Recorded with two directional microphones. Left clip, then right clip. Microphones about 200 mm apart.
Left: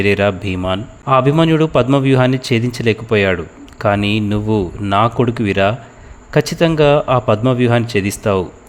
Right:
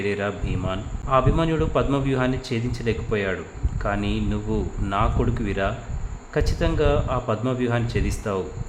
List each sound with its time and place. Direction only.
0.0 s a man's voice: 50° left (ahead or behind)